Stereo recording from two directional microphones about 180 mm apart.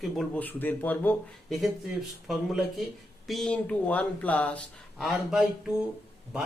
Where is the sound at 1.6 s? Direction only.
Centre (ahead or behind).